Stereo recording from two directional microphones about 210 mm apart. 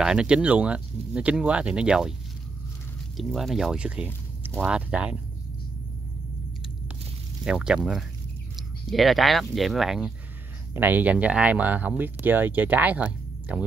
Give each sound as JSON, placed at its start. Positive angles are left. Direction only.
{"t": 0.0, "sound": "speech", "side_deg": -5}
{"t": 3.2, "sound": "speech", "side_deg": 0}
{"t": 7.4, "sound": "speech", "side_deg": -5}